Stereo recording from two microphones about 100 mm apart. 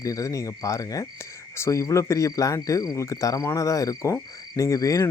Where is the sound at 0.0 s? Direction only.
35° left (ahead or behind).